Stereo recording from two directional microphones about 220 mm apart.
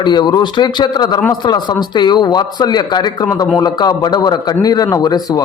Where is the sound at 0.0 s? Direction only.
20° left (ahead or behind).